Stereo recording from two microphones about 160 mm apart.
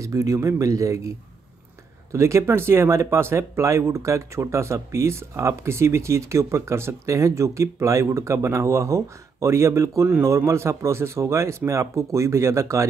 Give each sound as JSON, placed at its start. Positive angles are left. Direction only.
{"t": 0.0, "sound": "speech", "side_deg": -20}
{"t": 2.1, "sound": "speech", "side_deg": -20}